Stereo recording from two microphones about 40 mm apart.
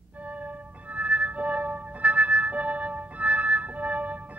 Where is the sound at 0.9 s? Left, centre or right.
Right.